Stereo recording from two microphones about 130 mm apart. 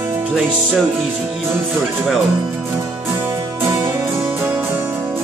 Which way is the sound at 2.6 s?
15° right (ahead or behind).